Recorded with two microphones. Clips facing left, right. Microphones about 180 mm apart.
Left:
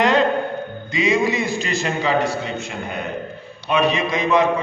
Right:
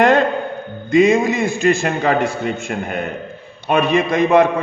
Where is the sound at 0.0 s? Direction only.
50° right (ahead or behind).